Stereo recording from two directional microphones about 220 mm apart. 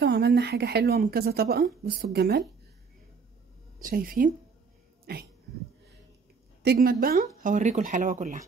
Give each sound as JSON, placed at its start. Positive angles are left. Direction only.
{"t": 0.0, "sound": "a woman's voice", "side_deg": -50}
{"t": 3.8, "sound": "speech", "side_deg": -40}
{"t": 6.6, "sound": "speech", "side_deg": -45}